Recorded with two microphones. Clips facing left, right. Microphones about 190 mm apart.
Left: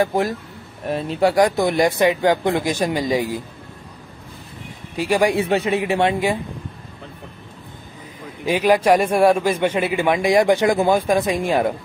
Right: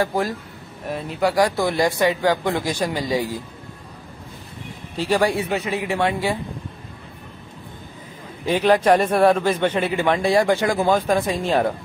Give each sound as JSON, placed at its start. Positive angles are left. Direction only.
{"t": 0.0, "sound": "speech", "side_deg": 20}
{"t": 4.9, "sound": "a man's voice", "side_deg": 10}
{"t": 5.4, "sound": "speech", "side_deg": 30}
{"t": 8.5, "sound": "a man's voice", "side_deg": 10}